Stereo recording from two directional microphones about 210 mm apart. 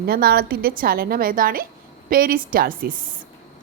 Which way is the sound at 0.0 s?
45° right (ahead or behind).